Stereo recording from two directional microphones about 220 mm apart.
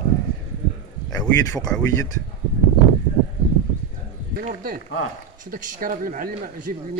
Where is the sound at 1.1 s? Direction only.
15° left (ahead or behind).